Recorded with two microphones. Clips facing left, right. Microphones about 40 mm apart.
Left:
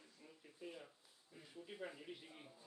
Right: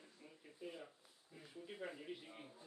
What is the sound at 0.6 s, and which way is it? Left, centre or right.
Speech, centre.